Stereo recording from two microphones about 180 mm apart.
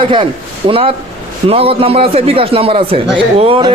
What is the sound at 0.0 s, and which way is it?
A man's voice, 25° right (ahead or behind).